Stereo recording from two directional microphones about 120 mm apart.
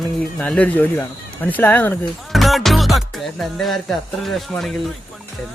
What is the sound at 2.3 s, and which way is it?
Music, centre (ahead or behind).